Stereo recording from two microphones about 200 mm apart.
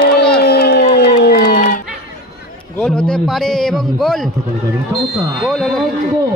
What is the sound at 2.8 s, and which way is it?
A man's voice, 5° left (ahead or behind).